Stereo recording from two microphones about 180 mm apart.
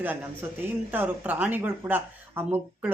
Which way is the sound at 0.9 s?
10° right (ahead or behind).